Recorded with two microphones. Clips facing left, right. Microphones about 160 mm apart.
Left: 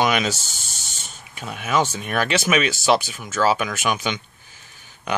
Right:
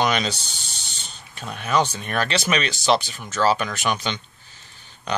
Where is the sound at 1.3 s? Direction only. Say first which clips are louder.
Even; 10° left (ahead or behind).